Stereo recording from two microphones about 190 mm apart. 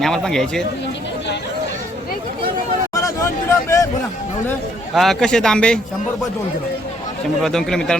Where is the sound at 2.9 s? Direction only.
15° left (ahead or behind).